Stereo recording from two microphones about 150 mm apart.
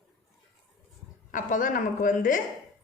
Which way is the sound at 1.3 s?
65° left (ahead or behind).